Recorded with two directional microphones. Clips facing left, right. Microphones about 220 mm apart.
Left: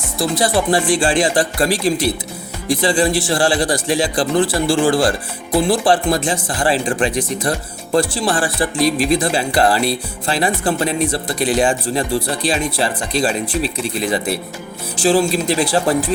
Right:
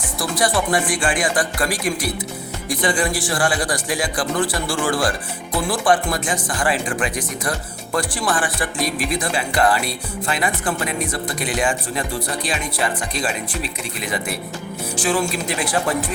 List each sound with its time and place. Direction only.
0.2 s a man's voice: 25° left (ahead or behind)